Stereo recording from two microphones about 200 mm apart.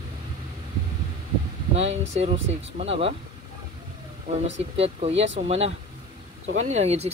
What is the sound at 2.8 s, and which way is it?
Speech, 30° right (ahead or behind).